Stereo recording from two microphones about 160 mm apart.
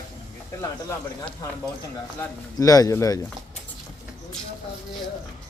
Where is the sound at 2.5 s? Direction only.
20° left (ahead or behind).